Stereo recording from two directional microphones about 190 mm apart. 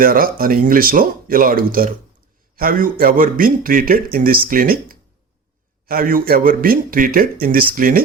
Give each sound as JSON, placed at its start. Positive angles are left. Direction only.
{"t": 0.0, "sound": "speech", "side_deg": -50}